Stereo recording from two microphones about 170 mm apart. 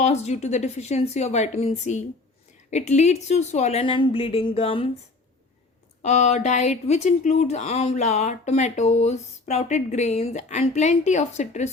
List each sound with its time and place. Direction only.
0.0 s a woman's voice: 40° left (ahead or behind)
6.0 s a woman's voice: 40° left (ahead or behind)